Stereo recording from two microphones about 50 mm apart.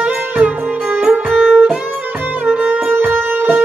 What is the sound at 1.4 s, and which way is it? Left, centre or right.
Music, right.